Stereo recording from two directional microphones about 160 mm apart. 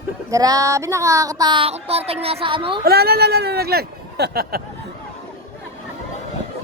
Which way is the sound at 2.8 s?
80° right.